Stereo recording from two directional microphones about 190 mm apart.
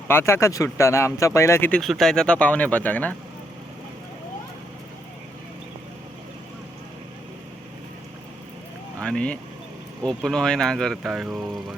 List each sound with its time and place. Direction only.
0.1 s speech: 15° left (ahead or behind)
1.8 s speech: centre (ahead or behind)
9.0 s vehicle: 5° left (ahead or behind)
10.0 s speech: centre (ahead or behind)